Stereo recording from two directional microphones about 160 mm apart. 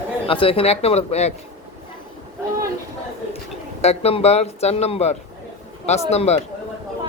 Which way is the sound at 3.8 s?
40° left (ahead or behind).